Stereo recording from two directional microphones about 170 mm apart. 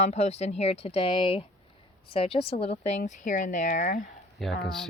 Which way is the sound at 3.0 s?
50° left (ahead or behind).